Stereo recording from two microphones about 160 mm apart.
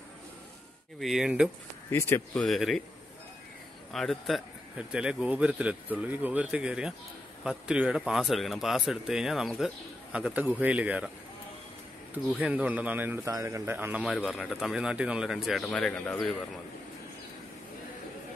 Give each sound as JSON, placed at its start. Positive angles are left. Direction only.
{"t": 1.0, "sound": "speech", "side_deg": -5}
{"t": 1.9, "sound": "speech", "side_deg": 15}
{"t": 2.4, "sound": "speech", "side_deg": 0}
{"t": 3.9, "sound": "a man's voice", "side_deg": 0}
{"t": 12.1, "sound": "a man's voice", "side_deg": -10}
{"t": 14.1, "sound": "speech", "side_deg": 0}